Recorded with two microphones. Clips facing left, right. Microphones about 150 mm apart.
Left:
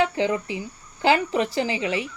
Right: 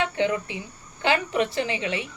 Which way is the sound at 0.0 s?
30° left (ahead or behind).